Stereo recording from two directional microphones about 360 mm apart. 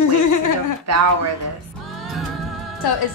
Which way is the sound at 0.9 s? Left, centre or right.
Right.